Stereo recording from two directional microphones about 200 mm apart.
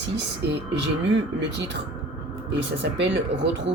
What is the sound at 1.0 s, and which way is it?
Speech, 60° right (ahead or behind).